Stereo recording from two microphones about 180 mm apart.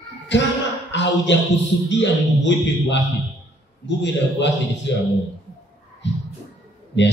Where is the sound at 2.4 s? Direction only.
75° left (ahead or behind).